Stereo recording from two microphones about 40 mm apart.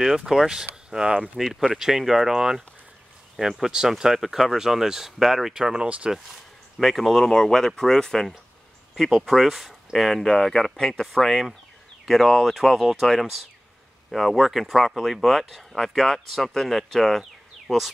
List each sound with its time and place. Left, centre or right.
0.0 s speech: centre
1.3 s speech: centre
5.5 s speech: centre
6.1 s speech: centre
8.9 s speech: centre
10.2 s speech: centre
11.1 s speech: centre
17.2 s a sound: centre